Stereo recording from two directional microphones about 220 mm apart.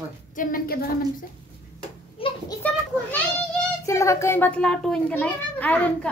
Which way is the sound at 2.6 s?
5° left (ahead or behind).